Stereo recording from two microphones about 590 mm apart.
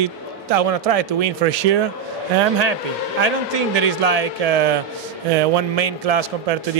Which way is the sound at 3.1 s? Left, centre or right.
Right.